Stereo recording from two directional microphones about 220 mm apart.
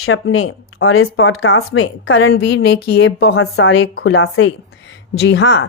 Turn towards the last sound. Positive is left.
turn(degrees=55)  # may be behind; listen again after turning